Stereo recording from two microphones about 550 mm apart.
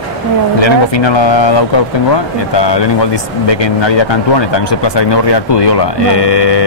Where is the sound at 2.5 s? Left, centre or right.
Left.